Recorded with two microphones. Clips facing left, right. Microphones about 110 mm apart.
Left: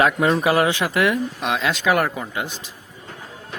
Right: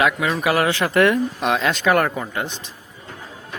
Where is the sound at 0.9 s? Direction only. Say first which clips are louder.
Right 3 dB; centre (ahead or behind).